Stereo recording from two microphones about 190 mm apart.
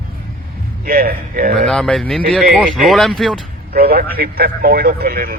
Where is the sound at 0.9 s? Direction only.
50° right (ahead or behind).